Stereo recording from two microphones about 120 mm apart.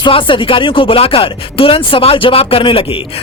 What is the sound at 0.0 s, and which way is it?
Speech, 45° left (ahead or behind).